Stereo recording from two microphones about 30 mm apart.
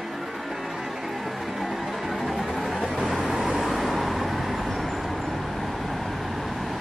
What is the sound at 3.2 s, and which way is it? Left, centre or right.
Vehicle, centre.